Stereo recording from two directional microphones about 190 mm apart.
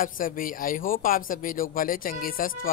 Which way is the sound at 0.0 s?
45° left (ahead or behind).